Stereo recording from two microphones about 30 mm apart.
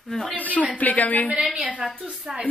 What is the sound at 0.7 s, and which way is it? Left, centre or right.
Speech, left.